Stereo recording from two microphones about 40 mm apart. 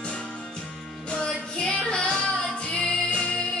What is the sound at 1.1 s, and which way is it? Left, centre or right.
Music, left.